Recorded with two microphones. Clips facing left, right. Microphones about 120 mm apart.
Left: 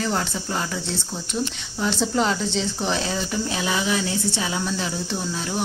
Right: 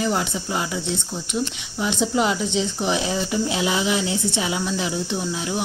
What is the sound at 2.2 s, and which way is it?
Speech, 10° right (ahead or behind).